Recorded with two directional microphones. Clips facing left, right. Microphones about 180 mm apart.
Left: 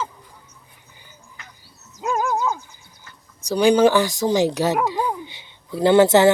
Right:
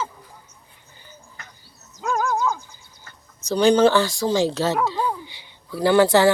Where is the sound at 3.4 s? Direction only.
10° left (ahead or behind).